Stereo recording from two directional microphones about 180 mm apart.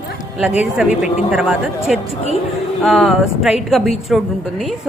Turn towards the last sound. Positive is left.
turn(degrees=0)  # may be behind; listen again after turning